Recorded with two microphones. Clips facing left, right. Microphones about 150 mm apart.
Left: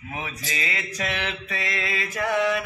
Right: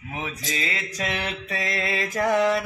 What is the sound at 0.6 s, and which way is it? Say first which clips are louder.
Mantra: left 1 dB; 35° right (ahead or behind).